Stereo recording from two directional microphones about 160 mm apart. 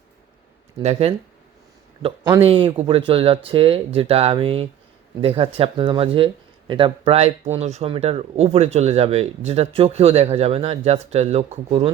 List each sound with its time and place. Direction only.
0.8 s a man's voice: 40° right (ahead or behind)